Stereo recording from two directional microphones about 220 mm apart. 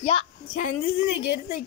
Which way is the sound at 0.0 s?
30° left (ahead or behind).